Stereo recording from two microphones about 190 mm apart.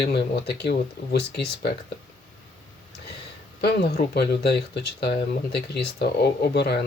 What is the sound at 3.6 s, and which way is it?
Speech, 60° left (ahead or behind).